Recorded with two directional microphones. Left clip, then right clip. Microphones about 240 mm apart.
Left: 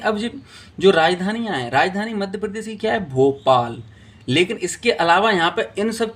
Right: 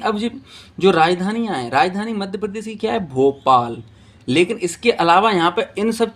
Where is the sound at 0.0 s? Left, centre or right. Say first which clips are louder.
Right 1 dB; right.